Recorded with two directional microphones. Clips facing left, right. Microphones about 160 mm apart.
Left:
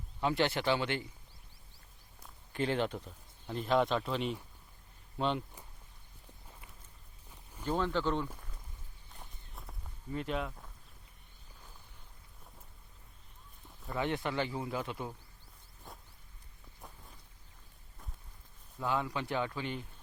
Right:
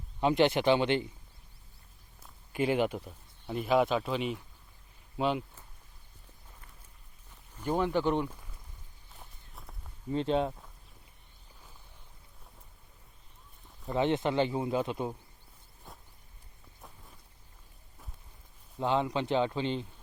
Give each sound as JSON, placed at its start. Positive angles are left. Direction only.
{"t": 0.2, "sound": "speech", "side_deg": -20}
{"t": 2.5, "sound": "speech", "side_deg": -10}
{"t": 7.6, "sound": "speech", "side_deg": -15}
{"t": 9.1, "sound": "walk", "side_deg": 0}
{"t": 10.1, "sound": "speech", "side_deg": -30}
{"t": 13.8, "sound": "speech", "side_deg": -20}
{"t": 15.9, "sound": "a sound", "side_deg": 0}
{"t": 18.8, "sound": "speech", "side_deg": -25}